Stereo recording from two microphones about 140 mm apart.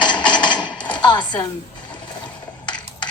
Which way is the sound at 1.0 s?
30° left (ahead or behind).